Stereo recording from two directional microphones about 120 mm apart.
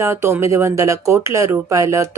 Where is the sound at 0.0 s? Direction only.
20° right (ahead or behind).